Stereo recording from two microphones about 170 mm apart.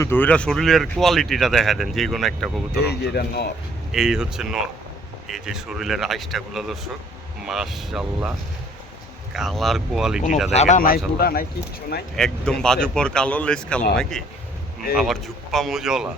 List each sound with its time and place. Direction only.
0.0 s speech: 10° left (ahead or behind)
2.8 s speech: 75° left (ahead or behind)
3.9 s speech: 5° right (ahead or behind)
9.3 s speech: centre (ahead or behind)
10.5 s speech: 40° left (ahead or behind)
10.8 s speech: 60° left (ahead or behind)
12.1 s speech: 5° left (ahead or behind)